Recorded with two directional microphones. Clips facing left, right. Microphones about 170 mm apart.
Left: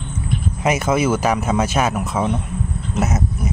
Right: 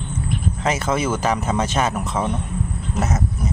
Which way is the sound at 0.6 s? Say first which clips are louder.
Left 4 dB; 10° left (ahead or behind).